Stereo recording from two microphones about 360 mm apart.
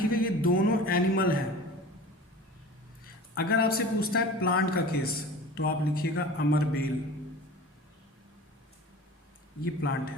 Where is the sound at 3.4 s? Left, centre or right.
Left.